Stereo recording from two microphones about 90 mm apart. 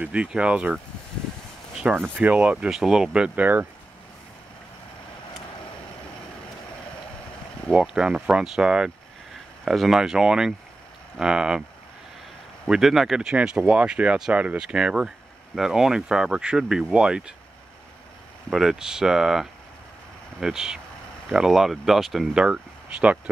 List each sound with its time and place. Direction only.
0.0 s speech: 10° right (ahead or behind)
1.8 s speech: 10° right (ahead or behind)
7.7 s speech: 10° right (ahead or behind)
12.6 s speech: 5° right (ahead or behind)
18.5 s speech: 5° right (ahead or behind)